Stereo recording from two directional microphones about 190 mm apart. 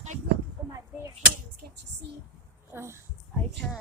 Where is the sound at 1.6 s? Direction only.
55° right (ahead or behind).